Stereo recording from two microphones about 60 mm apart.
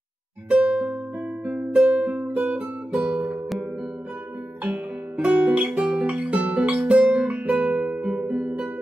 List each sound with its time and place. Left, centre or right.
0.5 s music: right
4.6 s guitar: right
5.7 s music: centre
5.9 s music: right